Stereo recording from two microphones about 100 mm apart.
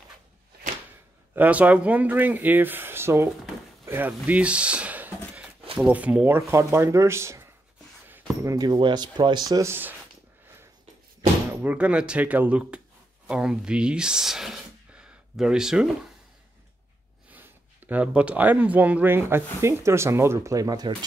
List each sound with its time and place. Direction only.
1.3 s speech: 15° right (ahead or behind)
3.8 s a sound: 20° right (ahead or behind)
5.9 s speech: 15° right (ahead or behind)
8.5 s speech: 45° right (ahead or behind)
9.5 s speech: 30° right (ahead or behind)
11.6 s speech: 15° right (ahead or behind)
17.3 s speech: 20° right (ahead or behind); by 20.9 s 40° right (ahead or behind)